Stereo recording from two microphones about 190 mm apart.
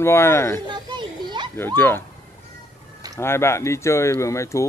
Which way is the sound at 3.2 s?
15° left (ahead or behind).